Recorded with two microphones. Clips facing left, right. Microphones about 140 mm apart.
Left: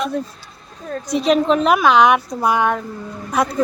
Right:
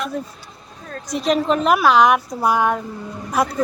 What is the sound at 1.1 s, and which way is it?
A woman's voice, centre (ahead or behind).